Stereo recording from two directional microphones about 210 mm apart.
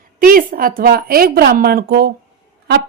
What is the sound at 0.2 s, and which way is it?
A woman's voice, 40° right (ahead or behind).